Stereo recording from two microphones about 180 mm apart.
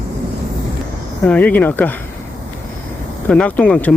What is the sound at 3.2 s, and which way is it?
Speech, 5° left (ahead or behind).